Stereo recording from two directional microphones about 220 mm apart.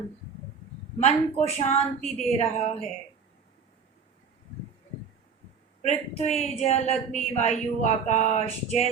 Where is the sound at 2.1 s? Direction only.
Centre (ahead or behind).